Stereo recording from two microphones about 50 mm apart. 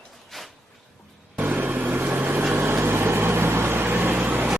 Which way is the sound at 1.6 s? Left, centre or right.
Right.